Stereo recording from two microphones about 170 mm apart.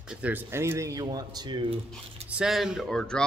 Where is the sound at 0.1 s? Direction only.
10° right (ahead or behind); by 1.8 s 25° right (ahead or behind).